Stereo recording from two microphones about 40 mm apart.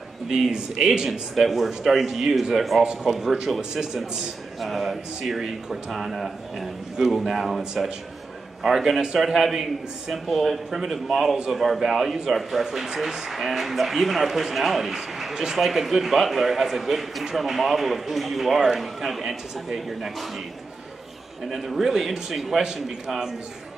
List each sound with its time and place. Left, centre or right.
0.5 s a man's voice: centre
1.3 s a man's voice: centre
2.8 s a man's voice: centre
8.6 s a man's voice: centre
21.5 s a man's voice: centre